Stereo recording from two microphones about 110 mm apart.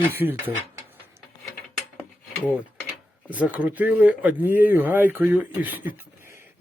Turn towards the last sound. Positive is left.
turn(degrees=-15)  # may be behind; listen again after turning